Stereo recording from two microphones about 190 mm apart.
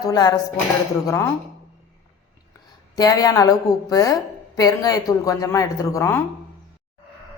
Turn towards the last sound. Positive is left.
turn(degrees=10)  # may be behind; listen again after turning